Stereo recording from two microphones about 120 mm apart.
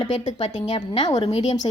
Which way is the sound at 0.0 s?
40° left (ahead or behind).